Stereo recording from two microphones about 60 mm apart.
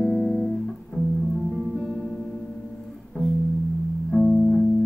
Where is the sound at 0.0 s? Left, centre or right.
Centre.